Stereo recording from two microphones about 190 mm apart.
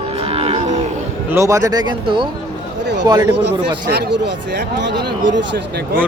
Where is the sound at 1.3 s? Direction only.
15° right (ahead or behind).